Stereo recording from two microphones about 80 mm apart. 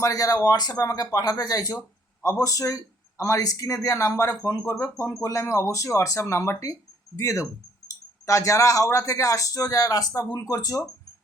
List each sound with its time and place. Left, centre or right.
0.0 s speech: left